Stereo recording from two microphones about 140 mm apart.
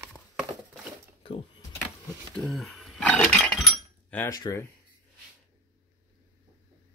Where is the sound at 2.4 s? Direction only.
Centre (ahead or behind).